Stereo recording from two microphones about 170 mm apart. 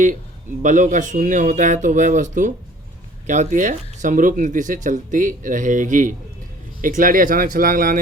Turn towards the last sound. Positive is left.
turn(degrees=-55)  # may be behind; listen again after turning